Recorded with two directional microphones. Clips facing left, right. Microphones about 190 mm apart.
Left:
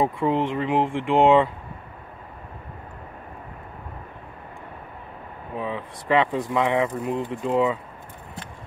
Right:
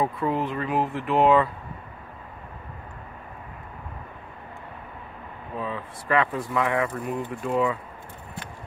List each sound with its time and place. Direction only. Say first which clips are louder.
0.0 s speech: left 3 dB; 25° left (ahead or behind)
5.6 s speech: left 2 dB; 20° left (ahead or behind)